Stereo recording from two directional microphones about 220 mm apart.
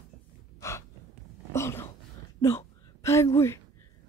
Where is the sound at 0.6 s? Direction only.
15° left (ahead or behind).